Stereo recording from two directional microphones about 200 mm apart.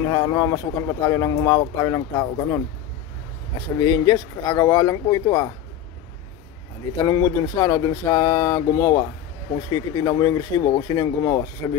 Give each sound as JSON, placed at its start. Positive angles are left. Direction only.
{"t": 0.0, "sound": "speech", "side_deg": 20}
{"t": 3.8, "sound": "speech", "side_deg": 20}
{"t": 7.1, "sound": "speech", "side_deg": 15}